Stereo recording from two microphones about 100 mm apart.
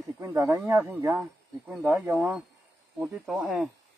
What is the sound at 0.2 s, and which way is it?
Speech, 30° right (ahead or behind).